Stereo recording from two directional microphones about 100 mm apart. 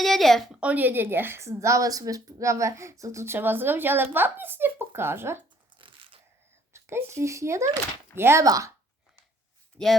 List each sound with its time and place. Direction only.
0.0 s a sound: centre (ahead or behind)
0.6 s a woman's voice: 15° right (ahead or behind)
5.8 s crunch: 60° right (ahead or behind)
6.7 s a woman's voice: 25° right (ahead or behind)
9.7 s speech: 5° left (ahead or behind)